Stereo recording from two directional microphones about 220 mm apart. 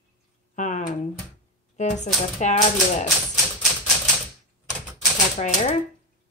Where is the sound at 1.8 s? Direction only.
35° left (ahead or behind).